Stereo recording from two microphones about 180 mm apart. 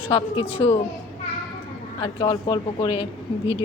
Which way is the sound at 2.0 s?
25° left (ahead or behind).